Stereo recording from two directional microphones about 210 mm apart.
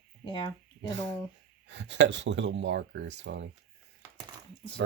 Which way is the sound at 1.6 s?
60° right (ahead or behind).